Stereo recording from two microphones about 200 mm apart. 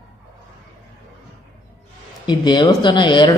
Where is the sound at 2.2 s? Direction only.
20° left (ahead or behind).